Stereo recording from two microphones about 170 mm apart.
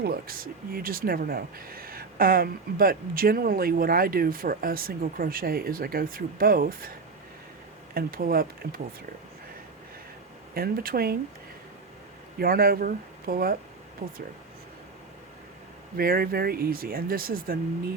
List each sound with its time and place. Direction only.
0.0 s speech: 65° right (ahead or behind)
7.9 s speech: 60° right (ahead or behind)
10.5 s speech: 60° right (ahead or behind)
12.4 s speech: 60° right (ahead or behind)
14.0 s speech: 45° right (ahead or behind)
16.0 s speech: 60° right (ahead or behind)